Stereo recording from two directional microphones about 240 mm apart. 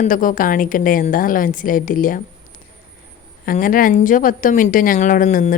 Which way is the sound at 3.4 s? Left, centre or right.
Left.